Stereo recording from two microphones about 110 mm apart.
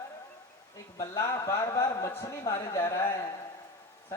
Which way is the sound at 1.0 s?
25° left (ahead or behind).